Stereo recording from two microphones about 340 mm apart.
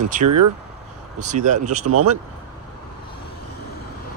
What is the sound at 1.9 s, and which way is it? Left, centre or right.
Speech, right.